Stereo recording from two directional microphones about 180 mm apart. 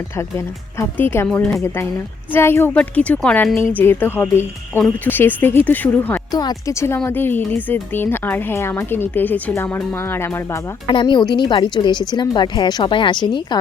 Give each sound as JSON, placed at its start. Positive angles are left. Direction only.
{"t": 0.2, "sound": "speech", "side_deg": 15}
{"t": 6.3, "sound": "speech", "side_deg": 20}
{"t": 10.9, "sound": "speech", "side_deg": 25}